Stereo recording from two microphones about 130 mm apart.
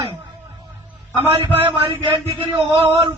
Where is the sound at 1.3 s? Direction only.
45° right (ahead or behind).